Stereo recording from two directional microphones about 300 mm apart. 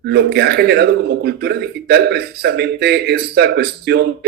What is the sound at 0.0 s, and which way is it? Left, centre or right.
Speech, right.